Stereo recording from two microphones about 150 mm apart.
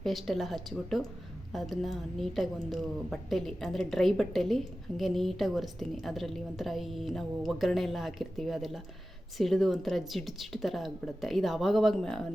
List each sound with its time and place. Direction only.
0.0 s a woman's voice: centre (ahead or behind)